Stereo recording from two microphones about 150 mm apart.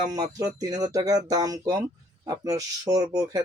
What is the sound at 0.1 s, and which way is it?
Speech, 25° right (ahead or behind).